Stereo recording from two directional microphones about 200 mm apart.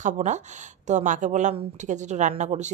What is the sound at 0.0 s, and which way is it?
Speech, 35° right (ahead or behind).